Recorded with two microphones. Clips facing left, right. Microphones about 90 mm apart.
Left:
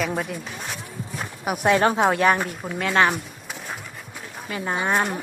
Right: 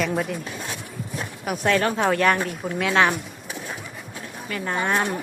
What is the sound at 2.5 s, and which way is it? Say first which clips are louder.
Speech: right 2 dB; centre (ahead or behind).